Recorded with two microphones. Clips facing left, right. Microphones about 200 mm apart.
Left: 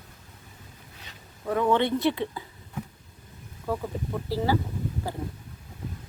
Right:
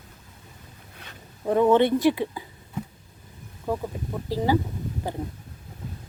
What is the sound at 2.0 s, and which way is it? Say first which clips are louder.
Speech: right 4 dB; 15° right (ahead or behind).